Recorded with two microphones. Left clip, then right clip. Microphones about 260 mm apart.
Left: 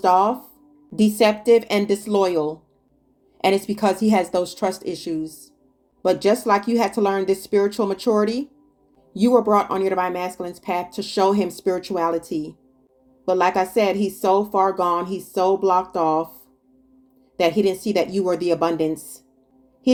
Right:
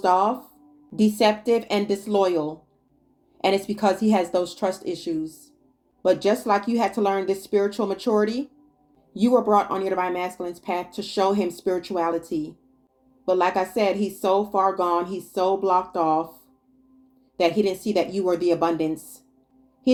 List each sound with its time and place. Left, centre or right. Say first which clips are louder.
0.0 s speech: left 3 dB; left
13.2 s speech: left 3 dB; left
17.3 s speech: left 2 dB; left